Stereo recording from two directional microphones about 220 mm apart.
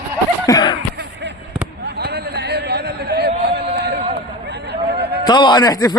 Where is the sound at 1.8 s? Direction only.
45° right (ahead or behind).